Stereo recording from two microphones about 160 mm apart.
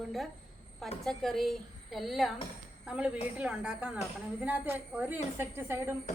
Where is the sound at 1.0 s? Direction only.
Centre (ahead or behind).